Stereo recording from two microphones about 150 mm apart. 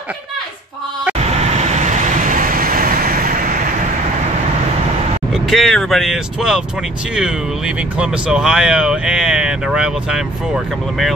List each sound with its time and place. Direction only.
1.4 s vehicle: 45° right (ahead or behind); by 3.5 s 65° right (ahead or behind)
5.3 s speech: centre (ahead or behind)